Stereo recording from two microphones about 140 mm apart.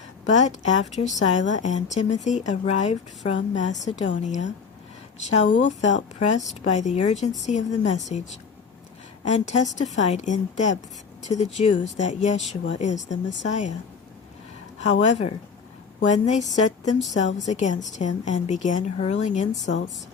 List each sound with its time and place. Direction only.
0.3 s a woman's voice: 55° left (ahead or behind)
9.2 s a woman's voice: 55° left (ahead or behind)
14.8 s a woman's voice: 50° left (ahead or behind)